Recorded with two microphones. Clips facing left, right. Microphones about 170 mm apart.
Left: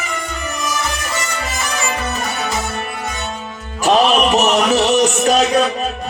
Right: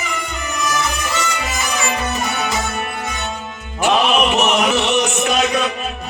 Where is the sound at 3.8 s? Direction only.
40° left (ahead or behind).